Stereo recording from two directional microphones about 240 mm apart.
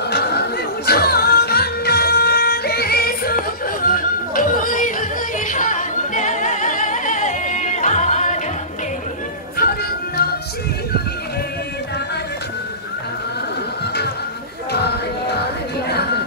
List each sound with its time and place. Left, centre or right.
0.1 s music: left
5.5 s singing: left
9.6 s music: left